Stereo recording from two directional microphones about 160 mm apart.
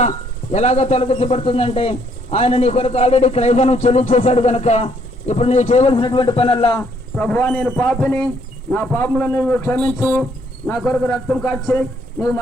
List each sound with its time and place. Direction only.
0.5 s speech: 45° left (ahead or behind)
7.2 s a man's voice: 10° left (ahead or behind)
11.7 s speech: 15° left (ahead or behind)